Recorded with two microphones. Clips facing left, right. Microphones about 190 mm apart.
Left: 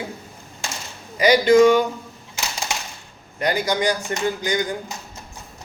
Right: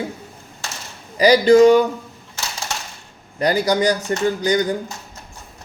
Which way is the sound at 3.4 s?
35° right (ahead or behind).